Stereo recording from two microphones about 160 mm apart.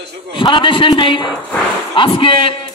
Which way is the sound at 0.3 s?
30° left (ahead or behind).